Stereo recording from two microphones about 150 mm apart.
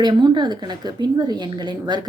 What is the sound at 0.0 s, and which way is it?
A woman's voice, 30° right (ahead or behind).